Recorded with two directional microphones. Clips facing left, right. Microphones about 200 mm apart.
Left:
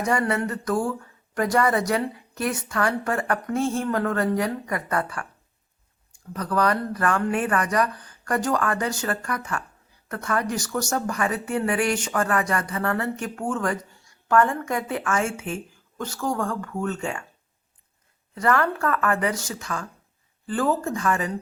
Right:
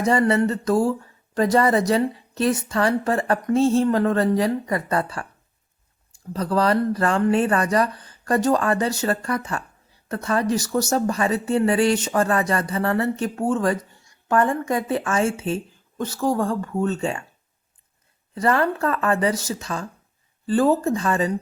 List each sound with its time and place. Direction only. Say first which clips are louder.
0.0 s speech: right 5 dB; 25° right (ahead or behind)
6.3 s speech: right 3 dB; 25° right (ahead or behind)
18.3 s speech: right 2 dB; 20° right (ahead or behind)